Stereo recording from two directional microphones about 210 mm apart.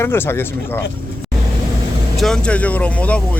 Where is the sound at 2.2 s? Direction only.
Centre (ahead or behind).